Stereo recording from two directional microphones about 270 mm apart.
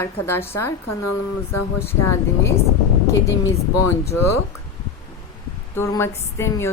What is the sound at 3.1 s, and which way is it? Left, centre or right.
Speech, centre.